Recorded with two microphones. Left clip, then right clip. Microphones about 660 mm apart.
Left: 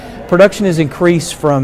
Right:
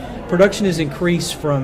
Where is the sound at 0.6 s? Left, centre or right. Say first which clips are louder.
Left 6 dB; left.